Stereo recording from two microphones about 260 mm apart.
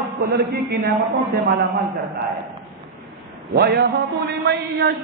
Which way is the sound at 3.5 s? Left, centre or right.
Right.